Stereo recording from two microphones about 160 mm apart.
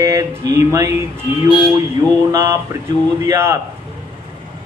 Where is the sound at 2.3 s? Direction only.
20° right (ahead or behind).